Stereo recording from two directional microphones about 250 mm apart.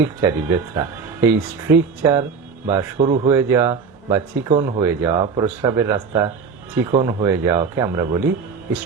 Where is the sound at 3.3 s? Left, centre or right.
Centre.